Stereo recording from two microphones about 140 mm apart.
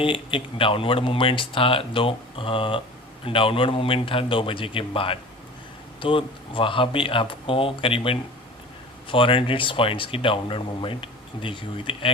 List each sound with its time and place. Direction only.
0.0 s speech: 40° left (ahead or behind)